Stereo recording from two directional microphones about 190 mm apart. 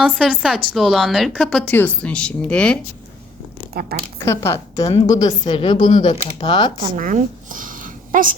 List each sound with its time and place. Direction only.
0.0 s a woman's voice: 5° right (ahead or behind)
4.2 s a woman's voice: 15° left (ahead or behind)
6.9 s a sound: 45° right (ahead or behind)